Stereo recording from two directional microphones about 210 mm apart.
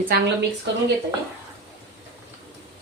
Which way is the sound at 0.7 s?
55° right (ahead or behind).